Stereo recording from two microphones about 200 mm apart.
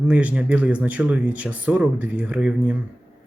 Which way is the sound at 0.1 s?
5° right (ahead or behind).